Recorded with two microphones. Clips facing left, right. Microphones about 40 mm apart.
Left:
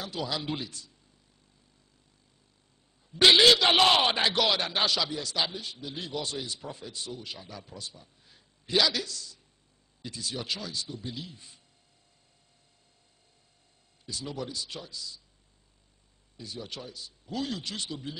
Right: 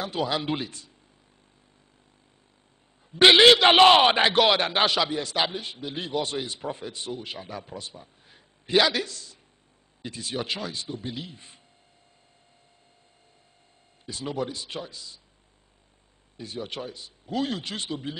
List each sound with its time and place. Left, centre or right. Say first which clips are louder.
0.0 s a man's voice: right 6 dB; right
3.1 s a man's voice: right 4 dB; right
14.0 s a man's voice: right 6 dB; right
16.3 s a man's voice: right 6 dB; right